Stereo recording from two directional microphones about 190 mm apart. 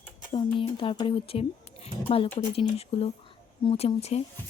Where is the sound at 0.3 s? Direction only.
30° left (ahead or behind).